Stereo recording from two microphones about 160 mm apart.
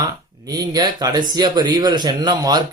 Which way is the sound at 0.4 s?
25° right (ahead or behind).